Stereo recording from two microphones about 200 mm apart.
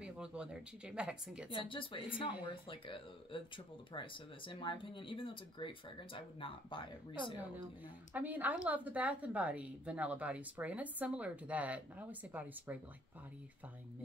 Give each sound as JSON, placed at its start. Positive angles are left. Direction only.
{"t": 0.0, "sound": "speech", "side_deg": -5}
{"t": 1.5, "sound": "speech", "side_deg": 25}
{"t": 8.1, "sound": "a woman's voice", "side_deg": -10}